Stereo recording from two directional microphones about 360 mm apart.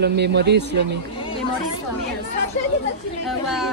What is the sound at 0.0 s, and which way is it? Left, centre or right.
Speech, right.